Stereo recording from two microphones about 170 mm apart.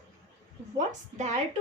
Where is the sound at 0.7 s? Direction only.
45° right (ahead or behind).